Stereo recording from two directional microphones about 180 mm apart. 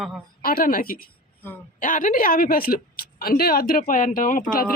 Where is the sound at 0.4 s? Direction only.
55° left (ahead or behind).